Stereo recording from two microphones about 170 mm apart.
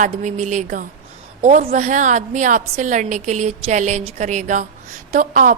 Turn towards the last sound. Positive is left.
turn(degrees=-55)  # may be behind; listen again after turning